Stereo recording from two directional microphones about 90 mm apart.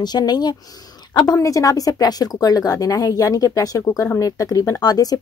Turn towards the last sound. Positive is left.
turn(degrees=45)  # may be behind; listen again after turning